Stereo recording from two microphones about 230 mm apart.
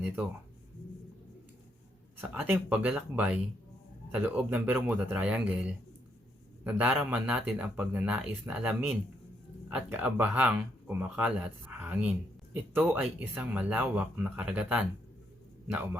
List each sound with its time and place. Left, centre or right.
2.3 s speech: centre